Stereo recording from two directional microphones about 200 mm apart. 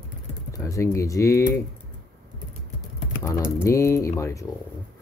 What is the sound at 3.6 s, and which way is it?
Speech, 15° left (ahead or behind).